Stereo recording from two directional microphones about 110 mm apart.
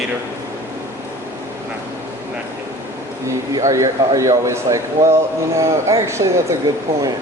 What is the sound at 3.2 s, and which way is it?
Speech, 30° right (ahead or behind).